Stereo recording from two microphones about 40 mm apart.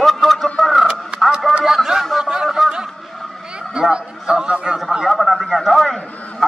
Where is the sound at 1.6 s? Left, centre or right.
Centre.